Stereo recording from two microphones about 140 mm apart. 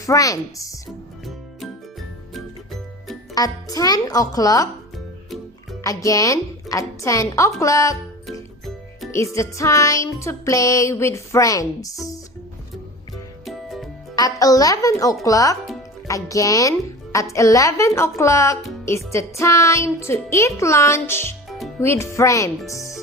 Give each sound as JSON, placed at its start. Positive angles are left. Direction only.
{"t": 0.0, "sound": "music", "side_deg": 25}
{"t": 1.6, "sound": "music", "side_deg": 0}
{"t": 3.3, "sound": "music", "side_deg": 25}
{"t": 5.8, "sound": "music", "side_deg": 25}
{"t": 8.3, "sound": "music", "side_deg": 0}
{"t": 9.1, "sound": "music", "side_deg": 20}
{"t": 13.4, "sound": "music", "side_deg": 0}
{"t": 14.2, "sound": "music", "side_deg": 25}